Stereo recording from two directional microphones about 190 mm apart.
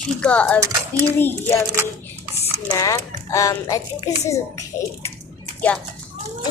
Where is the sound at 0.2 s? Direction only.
5° left (ahead or behind).